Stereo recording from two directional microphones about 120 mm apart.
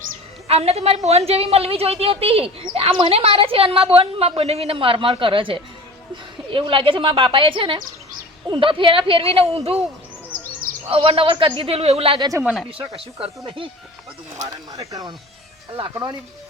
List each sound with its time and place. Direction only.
0.4 s a woman's voice: 55° right (ahead or behind)
10.8 s a woman's voice: 50° right (ahead or behind)
14.4 s speech: 30° right (ahead or behind)